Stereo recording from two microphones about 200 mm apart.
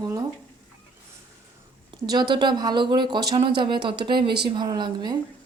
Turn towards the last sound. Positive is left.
turn(degrees=-20)  # may be behind; listen again after turning